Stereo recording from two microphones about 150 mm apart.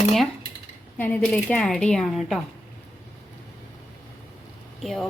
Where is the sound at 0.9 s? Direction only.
10° left (ahead or behind).